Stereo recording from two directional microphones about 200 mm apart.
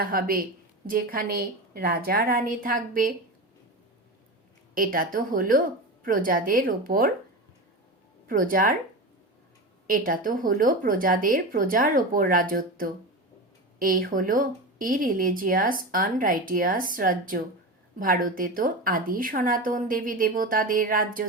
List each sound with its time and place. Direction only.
0.0 s speech: 45° right (ahead or behind)
4.7 s speech: 45° right (ahead or behind)
8.3 s speech: 45° right (ahead or behind)
9.8 s speech: 45° right (ahead or behind)